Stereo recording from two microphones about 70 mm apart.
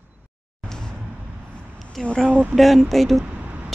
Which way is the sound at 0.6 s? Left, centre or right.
Centre.